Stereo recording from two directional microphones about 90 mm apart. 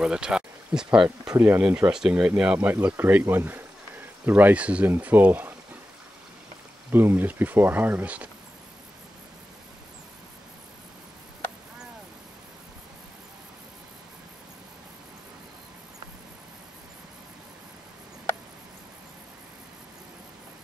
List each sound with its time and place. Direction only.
0.0 s speech: 10° right (ahead or behind)
6.9 s speech: 25° right (ahead or behind)